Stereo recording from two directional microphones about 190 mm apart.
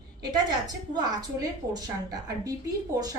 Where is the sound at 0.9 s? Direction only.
20° right (ahead or behind).